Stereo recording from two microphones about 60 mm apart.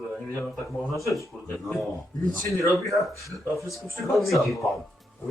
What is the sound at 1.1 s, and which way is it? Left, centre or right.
Speech, centre.